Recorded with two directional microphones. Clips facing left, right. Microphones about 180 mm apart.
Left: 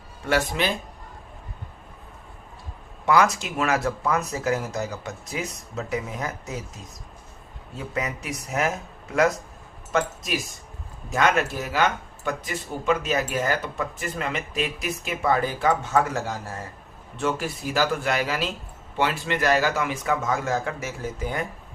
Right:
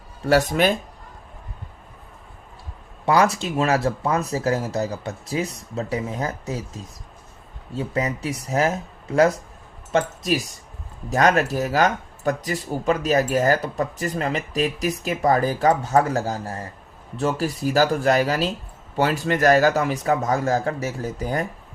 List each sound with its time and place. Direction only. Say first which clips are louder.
0.3 s speech: right 6 dB; 45° right (ahead or behind)
3.1 s speech: right 2 dB; 30° right (ahead or behind)
7.8 s speech: right 5 dB; 30° right (ahead or behind)